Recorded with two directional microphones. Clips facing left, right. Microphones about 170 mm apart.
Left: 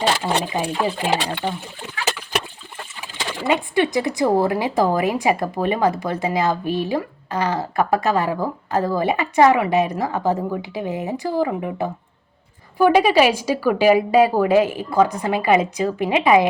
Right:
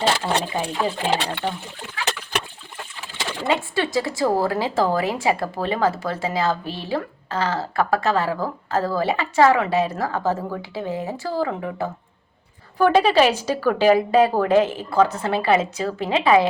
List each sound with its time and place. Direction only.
0.2 s speech: 10° left (ahead or behind)
3.5 s speech: 15° left (ahead or behind)